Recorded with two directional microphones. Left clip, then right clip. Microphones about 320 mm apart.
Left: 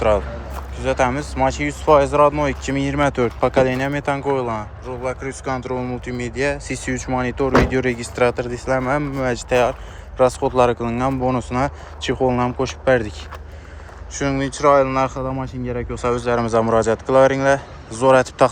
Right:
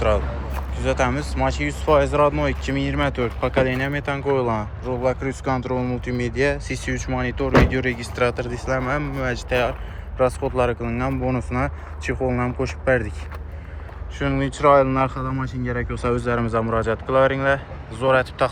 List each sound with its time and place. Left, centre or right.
0.5 s speech: centre